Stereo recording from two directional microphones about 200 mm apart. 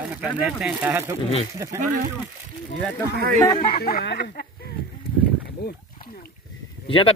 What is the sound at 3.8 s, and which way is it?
Speech, 50° left (ahead or behind).